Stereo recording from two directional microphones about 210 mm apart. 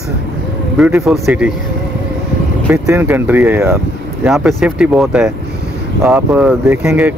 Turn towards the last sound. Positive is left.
turn(degrees=-5)  # may be behind; listen again after turning